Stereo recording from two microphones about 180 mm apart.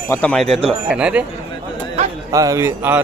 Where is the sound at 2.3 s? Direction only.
20° right (ahead or behind).